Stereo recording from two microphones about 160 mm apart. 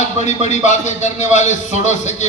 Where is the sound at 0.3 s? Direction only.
45° left (ahead or behind).